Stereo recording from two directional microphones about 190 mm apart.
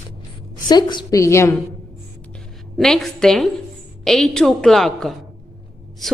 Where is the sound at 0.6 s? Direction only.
20° left (ahead or behind).